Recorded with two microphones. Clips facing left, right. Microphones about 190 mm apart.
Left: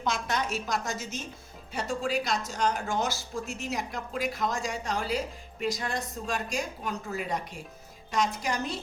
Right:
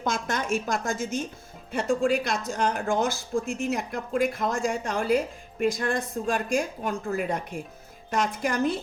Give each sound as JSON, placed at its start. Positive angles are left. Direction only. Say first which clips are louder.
{"t": 0.0, "sound": "speech", "louder": "right 2 dB", "side_deg": -50}